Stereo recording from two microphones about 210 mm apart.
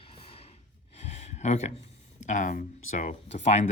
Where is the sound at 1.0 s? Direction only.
30° left (ahead or behind).